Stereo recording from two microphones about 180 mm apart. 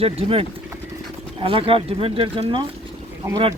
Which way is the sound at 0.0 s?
30° right (ahead or behind).